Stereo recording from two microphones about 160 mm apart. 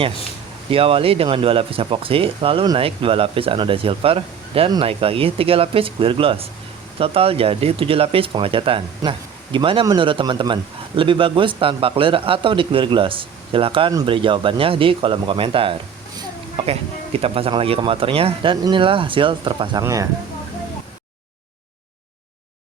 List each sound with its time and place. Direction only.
0.7 s speech: 35° right (ahead or behind)
19.8 s speech: 20° right (ahead or behind)